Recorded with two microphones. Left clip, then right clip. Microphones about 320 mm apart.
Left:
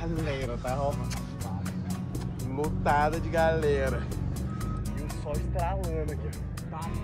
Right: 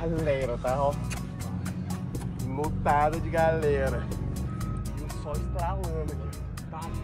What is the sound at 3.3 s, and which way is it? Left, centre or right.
Speech, right.